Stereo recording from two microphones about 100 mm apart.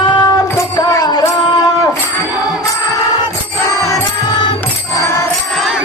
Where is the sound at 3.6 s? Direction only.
30° left (ahead or behind).